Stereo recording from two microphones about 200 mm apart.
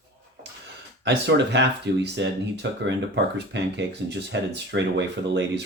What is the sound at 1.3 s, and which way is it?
Speech, 60° right (ahead or behind).